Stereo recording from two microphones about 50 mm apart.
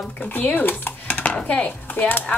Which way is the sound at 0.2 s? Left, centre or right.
Left.